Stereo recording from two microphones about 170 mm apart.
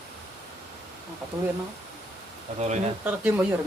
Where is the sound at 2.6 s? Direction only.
40° right (ahead or behind).